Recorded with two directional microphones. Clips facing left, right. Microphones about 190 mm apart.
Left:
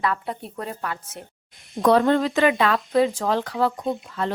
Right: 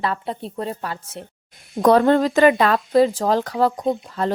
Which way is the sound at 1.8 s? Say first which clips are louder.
Right 3 dB; 45° right (ahead or behind).